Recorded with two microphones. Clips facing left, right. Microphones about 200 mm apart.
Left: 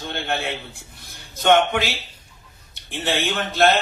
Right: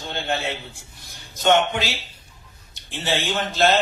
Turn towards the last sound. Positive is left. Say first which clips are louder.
# left 1 dB
turn(degrees=55)  # may be behind; listen again after turning